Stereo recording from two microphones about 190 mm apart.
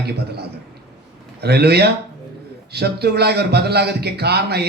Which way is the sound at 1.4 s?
60° right (ahead or behind).